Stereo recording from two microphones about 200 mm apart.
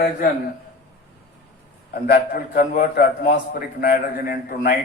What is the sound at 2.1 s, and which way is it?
A man's voice, 50° left (ahead or behind).